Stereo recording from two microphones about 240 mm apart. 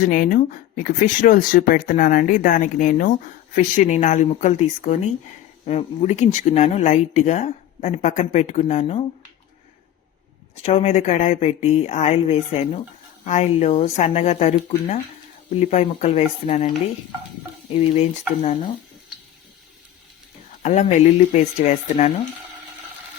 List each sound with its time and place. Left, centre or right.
0.0 s speech: left
10.5 s speech: left
15.5 s speech: left
20.6 s speech: left